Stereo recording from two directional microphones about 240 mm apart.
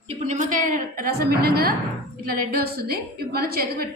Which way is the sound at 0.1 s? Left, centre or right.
Right.